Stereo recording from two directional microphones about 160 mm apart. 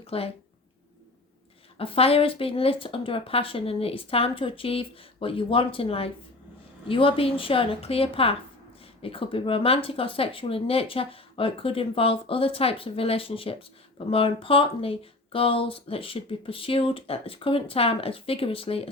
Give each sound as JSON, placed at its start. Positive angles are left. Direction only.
{"t": 0.1, "sound": "speech", "side_deg": 35}
{"t": 1.8, "sound": "speech", "side_deg": 35}